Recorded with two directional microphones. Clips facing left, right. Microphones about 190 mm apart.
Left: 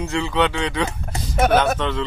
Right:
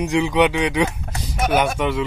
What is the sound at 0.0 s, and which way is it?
Speech, 15° right (ahead or behind).